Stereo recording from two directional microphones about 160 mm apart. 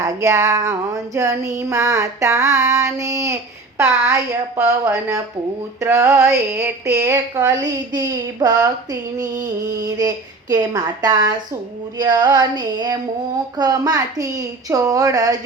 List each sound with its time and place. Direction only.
0.0 s speech: 20° right (ahead or behind)